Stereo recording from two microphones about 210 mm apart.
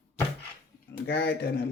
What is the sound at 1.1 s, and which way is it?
Speech, 50° left (ahead or behind).